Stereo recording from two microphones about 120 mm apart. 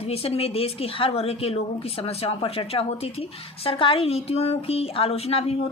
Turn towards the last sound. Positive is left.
turn(degrees=55)  # may be behind; listen again after turning